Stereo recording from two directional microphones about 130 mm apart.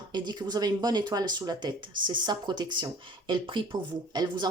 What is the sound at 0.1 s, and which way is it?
Speech, 35° right (ahead or behind).